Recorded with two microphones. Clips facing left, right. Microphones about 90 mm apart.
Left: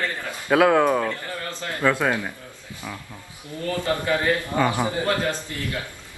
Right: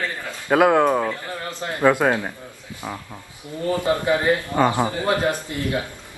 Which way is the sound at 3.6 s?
20° right (ahead or behind).